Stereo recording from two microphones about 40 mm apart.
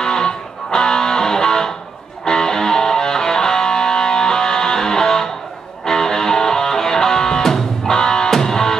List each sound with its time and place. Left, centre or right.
0.0 s music: centre